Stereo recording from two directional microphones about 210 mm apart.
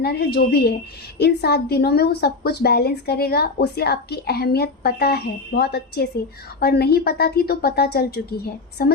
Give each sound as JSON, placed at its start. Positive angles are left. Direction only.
{"t": 0.0, "sound": "a woman's voice", "side_deg": 50}